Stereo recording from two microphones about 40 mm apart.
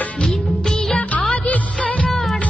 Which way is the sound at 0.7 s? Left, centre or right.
Centre.